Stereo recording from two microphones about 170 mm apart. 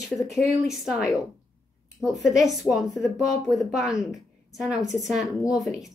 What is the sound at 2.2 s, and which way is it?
A woman's voice, centre (ahead or behind).